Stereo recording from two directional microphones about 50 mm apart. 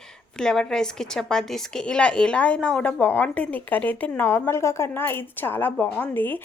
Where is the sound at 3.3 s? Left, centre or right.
Left.